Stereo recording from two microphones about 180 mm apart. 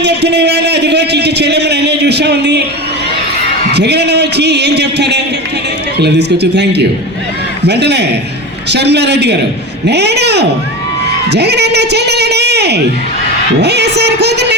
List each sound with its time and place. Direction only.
0.0 s a man's voice: 70° right (ahead or behind)
3.7 s a man's voice: 70° right (ahead or behind)